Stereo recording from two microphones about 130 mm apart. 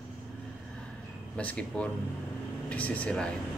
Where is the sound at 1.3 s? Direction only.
10° left (ahead or behind).